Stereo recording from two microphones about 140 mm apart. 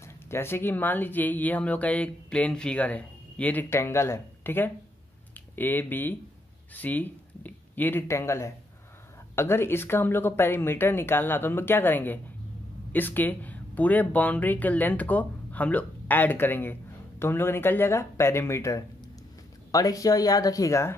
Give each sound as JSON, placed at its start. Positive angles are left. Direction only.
{"t": 0.0, "sound": "speech", "side_deg": 20}